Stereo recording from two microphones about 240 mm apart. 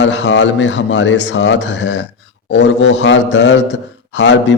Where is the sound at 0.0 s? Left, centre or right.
Left.